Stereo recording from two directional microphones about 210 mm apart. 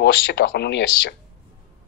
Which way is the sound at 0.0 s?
50° left (ahead or behind).